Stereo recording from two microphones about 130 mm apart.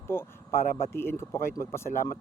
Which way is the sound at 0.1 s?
20° left (ahead or behind).